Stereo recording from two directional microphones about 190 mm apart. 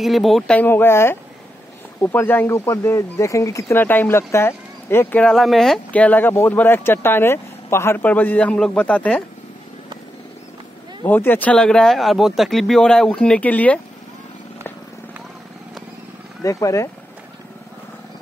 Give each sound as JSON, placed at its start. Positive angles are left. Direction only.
{"t": 0.0, "sound": "speech", "side_deg": 0}
{"t": 11.1, "sound": "speech", "side_deg": 10}
{"t": 16.4, "sound": "speech", "side_deg": 15}